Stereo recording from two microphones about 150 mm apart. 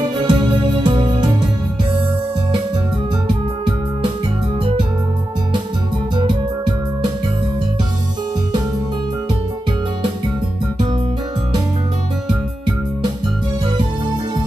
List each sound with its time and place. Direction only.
0.3 s music: 30° right (ahead or behind)
3.3 s music: 35° right (ahead or behind)
6.1 s music: 30° right (ahead or behind)